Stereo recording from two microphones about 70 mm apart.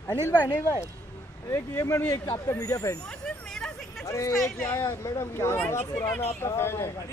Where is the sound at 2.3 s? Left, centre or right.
Left.